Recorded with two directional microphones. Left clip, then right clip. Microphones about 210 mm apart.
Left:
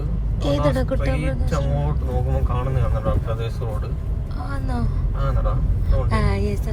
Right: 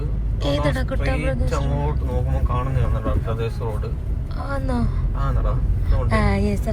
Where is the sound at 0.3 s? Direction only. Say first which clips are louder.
Left 2 dB; 20° left (ahead or behind).